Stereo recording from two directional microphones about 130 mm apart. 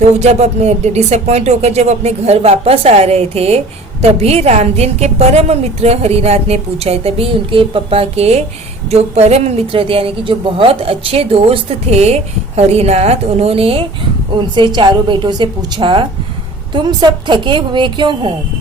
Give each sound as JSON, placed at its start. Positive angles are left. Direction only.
{"t": 0.2, "sound": "a woman's voice", "side_deg": -55}